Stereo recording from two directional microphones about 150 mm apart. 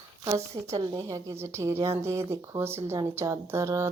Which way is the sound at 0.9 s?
20° right (ahead or behind).